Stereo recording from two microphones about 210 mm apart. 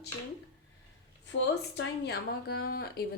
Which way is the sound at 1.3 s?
55° left (ahead or behind).